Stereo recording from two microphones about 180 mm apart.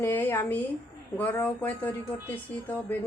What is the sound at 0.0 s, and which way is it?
A woman's voice, 10° left (ahead or behind).